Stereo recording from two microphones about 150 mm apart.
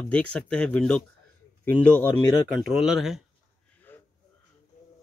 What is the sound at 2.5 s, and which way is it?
Speech, centre (ahead or behind).